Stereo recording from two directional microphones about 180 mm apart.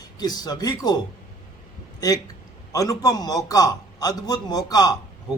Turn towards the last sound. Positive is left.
turn(degrees=20)  # may be behind; listen again after turning